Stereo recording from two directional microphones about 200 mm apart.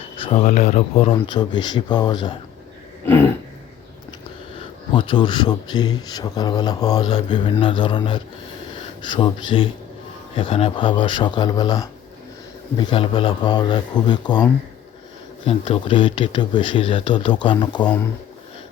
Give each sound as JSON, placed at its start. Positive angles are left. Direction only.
{"t": 0.2, "sound": "a man's voice", "side_deg": 30}
{"t": 4.9, "sound": "a man's voice", "side_deg": 25}
{"t": 15.4, "sound": "a man's voice", "side_deg": 25}